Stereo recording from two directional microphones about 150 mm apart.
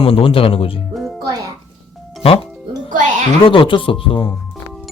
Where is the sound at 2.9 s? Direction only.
55° right (ahead or behind).